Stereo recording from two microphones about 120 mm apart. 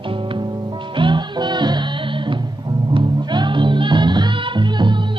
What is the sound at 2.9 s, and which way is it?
Music, 40° right (ahead or behind).